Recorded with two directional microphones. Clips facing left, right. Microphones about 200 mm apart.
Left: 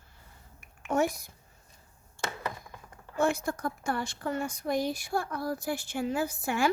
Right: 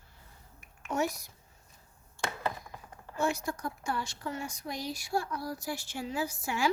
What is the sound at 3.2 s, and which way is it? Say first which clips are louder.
A woman's voice: left 4 dB; 55° left (ahead or behind).